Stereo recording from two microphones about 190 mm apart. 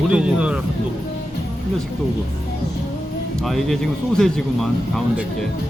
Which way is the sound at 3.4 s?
Centre (ahead or behind).